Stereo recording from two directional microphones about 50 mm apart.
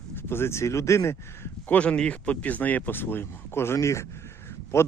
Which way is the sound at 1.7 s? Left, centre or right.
Left.